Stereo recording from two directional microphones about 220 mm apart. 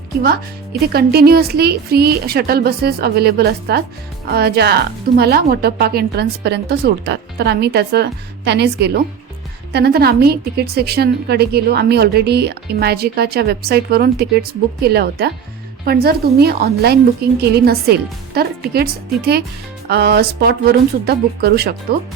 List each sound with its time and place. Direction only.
0.2 s a woman's voice: 45° right (ahead or behind)